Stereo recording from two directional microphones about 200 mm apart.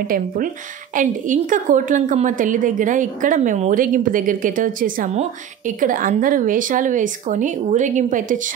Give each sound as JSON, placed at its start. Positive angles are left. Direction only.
{"t": 0.9, "sound": "a woman's voice", "side_deg": -40}